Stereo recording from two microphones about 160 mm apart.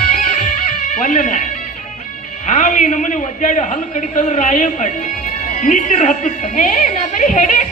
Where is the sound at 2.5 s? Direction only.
50° left (ahead or behind).